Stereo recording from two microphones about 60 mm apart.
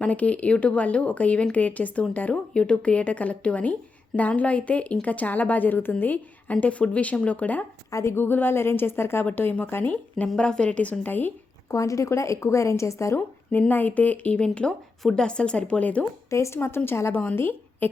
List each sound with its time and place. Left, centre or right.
0.0 s a woman's voice: left
7.9 s speech: left
8.1 s a woman's voice: left
10.3 s speech: centre
11.0 s a woman's voice: left
11.7 s speech: left
13.1 s a woman's voice: left
16.3 s speech: left
16.6 s a woman's voice: left